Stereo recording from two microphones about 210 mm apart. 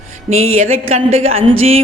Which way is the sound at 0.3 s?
30° right (ahead or behind).